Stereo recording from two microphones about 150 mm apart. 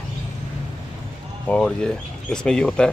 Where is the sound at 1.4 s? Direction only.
5° left (ahead or behind).